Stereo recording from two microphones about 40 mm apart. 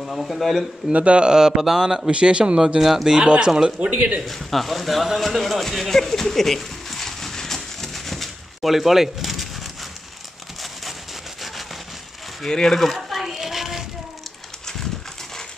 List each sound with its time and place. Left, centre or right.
0.0 s speech: centre
0.9 s speech: right; by 2.0 s centre
2.0 s speech: right
2.8 s speech: centre
3.1 s speech: right
3.8 s speech: right
4.3 s speech: centre
12.4 s children playing: centre